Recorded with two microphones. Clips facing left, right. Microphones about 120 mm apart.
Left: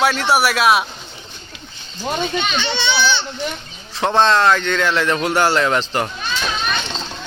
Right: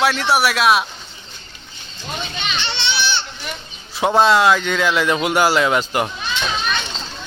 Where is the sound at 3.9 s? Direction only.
10° right (ahead or behind).